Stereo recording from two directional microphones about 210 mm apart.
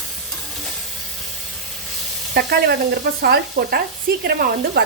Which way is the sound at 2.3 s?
50° right (ahead or behind).